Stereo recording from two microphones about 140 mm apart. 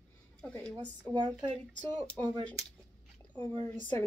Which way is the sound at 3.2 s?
10° left (ahead or behind).